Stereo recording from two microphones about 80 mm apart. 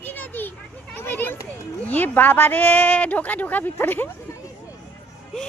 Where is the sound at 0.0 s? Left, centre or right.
Left.